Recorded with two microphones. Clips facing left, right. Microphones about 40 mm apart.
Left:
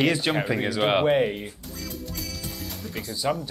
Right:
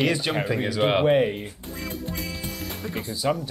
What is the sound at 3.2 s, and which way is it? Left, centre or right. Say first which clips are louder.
Speech: right 1 dB; centre.